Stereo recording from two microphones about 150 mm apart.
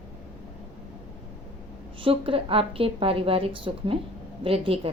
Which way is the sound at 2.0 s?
35° right (ahead or behind).